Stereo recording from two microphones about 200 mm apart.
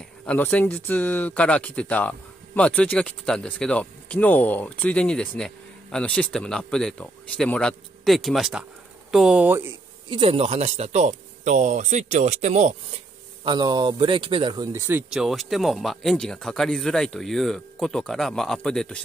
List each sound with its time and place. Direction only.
0.2 s speech: 10° left (ahead or behind); by 9.7 s 10° right (ahead or behind)
10.0 s speech: 25° right (ahead or behind)
13.4 s speech: 25° right (ahead or behind); by 19.0 s 5° left (ahead or behind)